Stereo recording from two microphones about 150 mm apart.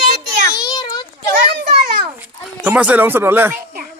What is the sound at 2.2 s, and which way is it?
Speech, 10° right (ahead or behind).